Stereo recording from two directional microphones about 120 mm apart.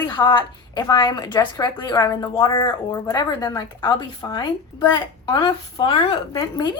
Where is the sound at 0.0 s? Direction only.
40° left (ahead or behind).